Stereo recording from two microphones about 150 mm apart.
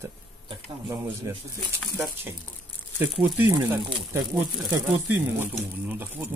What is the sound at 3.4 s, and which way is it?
Speech, 15° right (ahead or behind).